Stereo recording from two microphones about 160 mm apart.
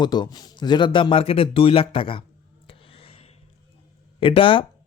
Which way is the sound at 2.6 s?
35° left (ahead or behind).